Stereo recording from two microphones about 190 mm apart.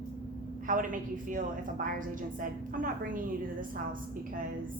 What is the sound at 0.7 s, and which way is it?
A woman's voice, 45° right (ahead or behind).